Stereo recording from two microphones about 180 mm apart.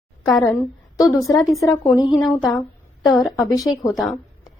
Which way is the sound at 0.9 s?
20° left (ahead or behind).